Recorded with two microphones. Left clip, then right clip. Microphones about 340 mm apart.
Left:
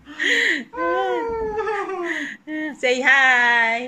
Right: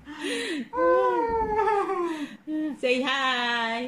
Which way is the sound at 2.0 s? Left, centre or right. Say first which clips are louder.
Left 5 dB; left.